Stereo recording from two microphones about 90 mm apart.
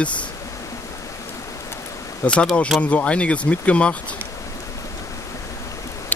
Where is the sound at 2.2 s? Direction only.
15° left (ahead or behind).